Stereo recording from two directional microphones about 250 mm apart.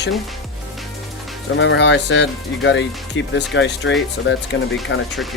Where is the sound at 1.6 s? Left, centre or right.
Left.